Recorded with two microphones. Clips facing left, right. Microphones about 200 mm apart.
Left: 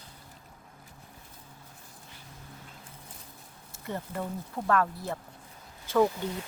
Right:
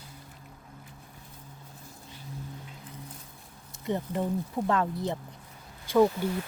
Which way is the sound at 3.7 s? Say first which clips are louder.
Right 6 dB; 20° right (ahead or behind).